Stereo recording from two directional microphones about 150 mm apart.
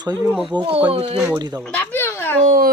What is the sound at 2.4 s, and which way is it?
Speech, 65° right (ahead or behind).